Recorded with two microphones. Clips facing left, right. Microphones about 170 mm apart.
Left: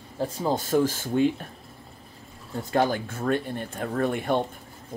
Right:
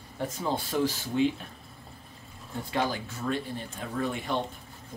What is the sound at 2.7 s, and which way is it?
Speech, 50° left (ahead or behind).